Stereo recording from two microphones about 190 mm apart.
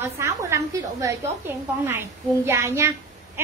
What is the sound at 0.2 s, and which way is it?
A woman's voice, 15° right (ahead or behind).